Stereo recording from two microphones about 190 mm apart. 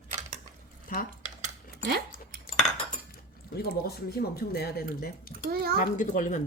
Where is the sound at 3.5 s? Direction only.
55° left (ahead or behind).